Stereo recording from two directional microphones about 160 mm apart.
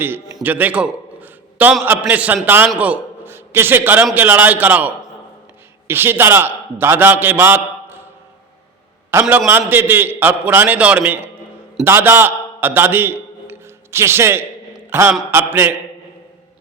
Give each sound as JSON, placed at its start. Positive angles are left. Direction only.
{"t": 0.4, "sound": "a sound", "side_deg": -10}
{"t": 1.8, "sound": "a man's voice", "side_deg": -10}
{"t": 5.9, "sound": "a man's voice", "side_deg": -15}
{"t": 9.2, "sound": "a man's voice", "side_deg": 0}
{"t": 9.5, "sound": "a man's voice", "side_deg": -10}
{"t": 14.8, "sound": "a sound", "side_deg": -15}
{"t": 15.3, "sound": "a man's voice", "side_deg": -15}